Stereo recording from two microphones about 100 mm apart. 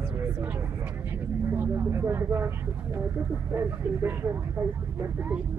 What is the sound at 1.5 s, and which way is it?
Speech, 25° right (ahead or behind).